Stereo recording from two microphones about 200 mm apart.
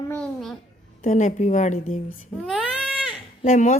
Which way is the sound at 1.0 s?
40° left (ahead or behind).